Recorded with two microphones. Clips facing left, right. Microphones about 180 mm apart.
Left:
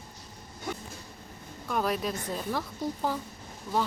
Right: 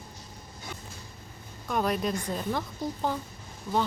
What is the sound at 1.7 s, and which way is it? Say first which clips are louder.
Speech: right 2 dB; centre (ahead or behind).